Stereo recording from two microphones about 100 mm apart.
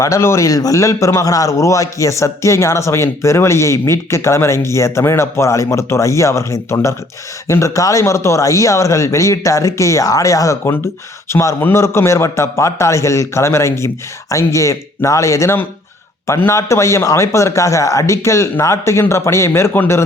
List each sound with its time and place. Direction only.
0.0 s a man's voice: 25° left (ahead or behind)